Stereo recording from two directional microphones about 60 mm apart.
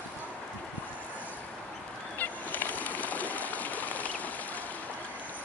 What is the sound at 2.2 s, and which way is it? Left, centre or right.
Bird, left.